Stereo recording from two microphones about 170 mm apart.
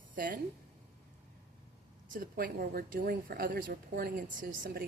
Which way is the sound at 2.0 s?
55° right (ahead or behind).